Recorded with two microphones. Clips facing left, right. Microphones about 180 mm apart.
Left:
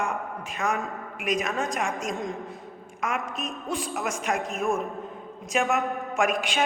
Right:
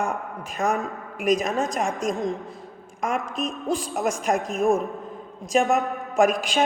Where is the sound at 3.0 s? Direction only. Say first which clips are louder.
Right 4 dB; 35° right (ahead or behind).